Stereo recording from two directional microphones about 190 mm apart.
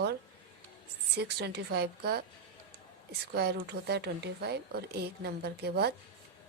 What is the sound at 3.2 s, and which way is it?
Speech, 55° right (ahead or behind).